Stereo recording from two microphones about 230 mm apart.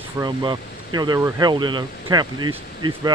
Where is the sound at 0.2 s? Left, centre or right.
Centre.